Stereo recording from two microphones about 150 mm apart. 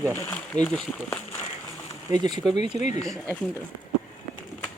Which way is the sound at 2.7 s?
50° left (ahead or behind).